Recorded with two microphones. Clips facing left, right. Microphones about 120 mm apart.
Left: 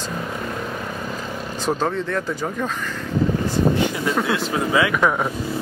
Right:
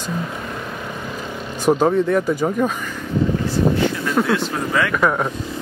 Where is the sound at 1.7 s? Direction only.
15° right (ahead or behind).